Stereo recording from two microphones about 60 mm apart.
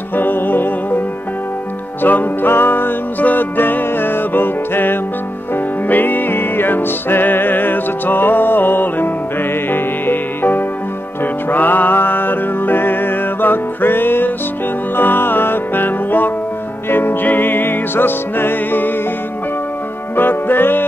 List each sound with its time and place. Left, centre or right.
0.1 s music: left
2.0 s music: left
20.2 s music: left